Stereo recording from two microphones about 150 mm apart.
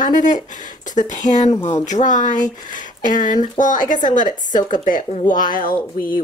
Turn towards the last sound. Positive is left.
turn(degrees=70)  # may be behind; listen again after turning